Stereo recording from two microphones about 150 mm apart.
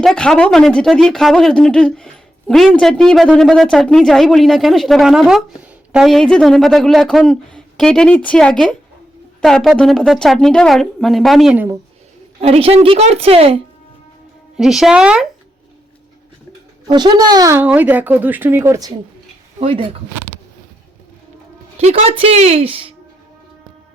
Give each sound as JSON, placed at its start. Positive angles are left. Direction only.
{"t": 0.0, "sound": "a woman's voice", "side_deg": 5}
{"t": 11.5, "sound": "speech", "side_deg": -15}
{"t": 12.4, "sound": "a woman's voice", "side_deg": -40}
{"t": 14.5, "sound": "a woman's voice", "side_deg": 0}
{"t": 16.9, "sound": "a child's voice", "side_deg": -30}
{"t": 17.6, "sound": "speech", "side_deg": -10}
{"t": 19.5, "sound": "speech", "side_deg": -40}
{"t": 21.8, "sound": "a woman's voice", "side_deg": -45}